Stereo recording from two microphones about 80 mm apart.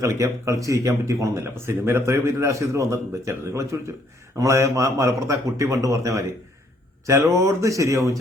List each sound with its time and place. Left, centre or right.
0.0 s speech: right